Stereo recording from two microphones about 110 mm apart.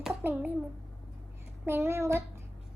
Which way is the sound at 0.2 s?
15° right (ahead or behind).